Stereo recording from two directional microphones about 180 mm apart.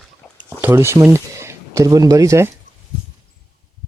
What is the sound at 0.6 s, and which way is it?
Speech, 15° right (ahead or behind).